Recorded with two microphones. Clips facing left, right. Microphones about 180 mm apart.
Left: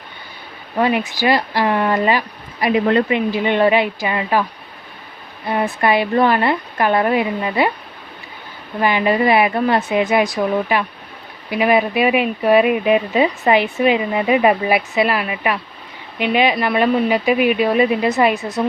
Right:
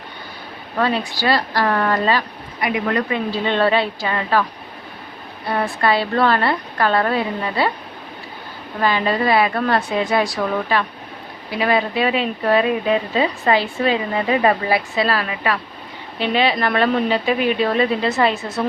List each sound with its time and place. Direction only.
0.8 s speech: 15° left (ahead or behind)
5.5 s speech: 15° left (ahead or behind)
8.8 s speech: 15° left (ahead or behind)